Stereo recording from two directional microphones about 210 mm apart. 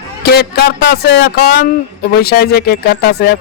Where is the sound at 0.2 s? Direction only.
50° left (ahead or behind).